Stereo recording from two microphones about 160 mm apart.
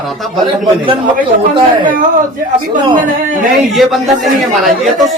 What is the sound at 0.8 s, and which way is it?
Speech, 30° right (ahead or behind).